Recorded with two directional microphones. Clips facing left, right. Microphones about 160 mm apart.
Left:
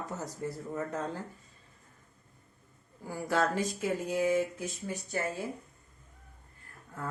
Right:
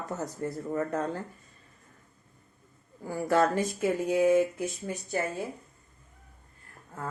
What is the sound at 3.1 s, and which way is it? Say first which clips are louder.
Speech: right 5 dB; 55° right (ahead or behind).